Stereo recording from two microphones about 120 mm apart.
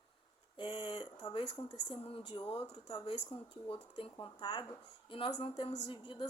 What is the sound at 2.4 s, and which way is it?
A woman's voice, 40° left (ahead or behind).